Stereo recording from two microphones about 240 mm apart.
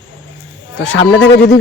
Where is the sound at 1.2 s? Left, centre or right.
Left.